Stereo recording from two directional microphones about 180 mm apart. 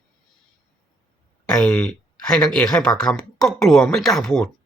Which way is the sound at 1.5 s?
5° left (ahead or behind).